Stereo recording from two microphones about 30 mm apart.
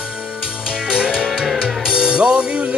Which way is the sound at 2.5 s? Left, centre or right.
Right.